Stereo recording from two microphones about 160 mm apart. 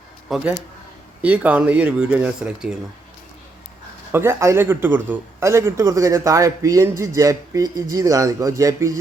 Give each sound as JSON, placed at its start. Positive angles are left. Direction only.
{"t": 0.3, "sound": "speech", "side_deg": -5}
{"t": 4.1, "sound": "a man's voice", "side_deg": -15}